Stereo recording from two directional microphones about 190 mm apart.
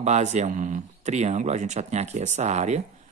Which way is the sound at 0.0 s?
35° right (ahead or behind).